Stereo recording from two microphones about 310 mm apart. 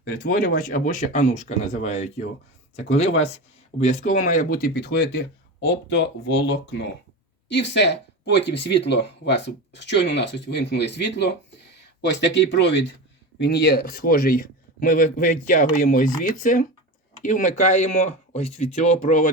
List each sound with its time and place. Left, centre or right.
0.0 s a man's voice: left